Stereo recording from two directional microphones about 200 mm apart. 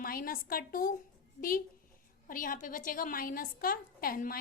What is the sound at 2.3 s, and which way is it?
A woman's voice, 45° left (ahead or behind).